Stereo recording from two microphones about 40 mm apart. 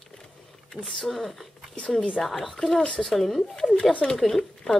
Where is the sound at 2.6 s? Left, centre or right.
Centre.